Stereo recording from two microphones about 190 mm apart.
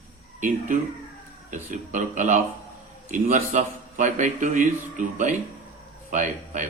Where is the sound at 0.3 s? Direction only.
45° right (ahead or behind).